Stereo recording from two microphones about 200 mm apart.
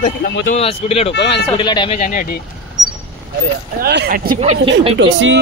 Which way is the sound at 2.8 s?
Centre (ahead or behind).